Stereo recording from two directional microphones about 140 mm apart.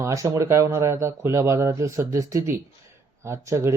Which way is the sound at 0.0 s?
20° right (ahead or behind).